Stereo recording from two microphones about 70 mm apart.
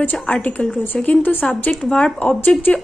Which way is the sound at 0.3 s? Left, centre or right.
Left.